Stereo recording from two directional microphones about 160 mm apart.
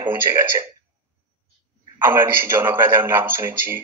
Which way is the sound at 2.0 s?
15° right (ahead or behind).